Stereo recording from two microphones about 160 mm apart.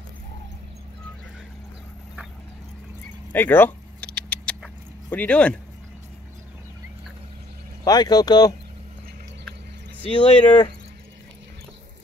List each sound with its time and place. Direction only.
3.3 s vehicle: 10° left (ahead or behind)
5.1 s speech: 10° left (ahead or behind)
7.8 s speech: 25° left (ahead or behind)
10.0 s speech: 30° left (ahead or behind)